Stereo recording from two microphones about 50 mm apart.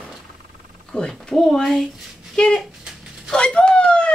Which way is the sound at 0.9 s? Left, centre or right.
Centre.